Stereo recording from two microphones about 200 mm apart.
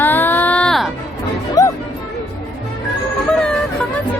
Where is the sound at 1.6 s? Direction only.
20° left (ahead or behind).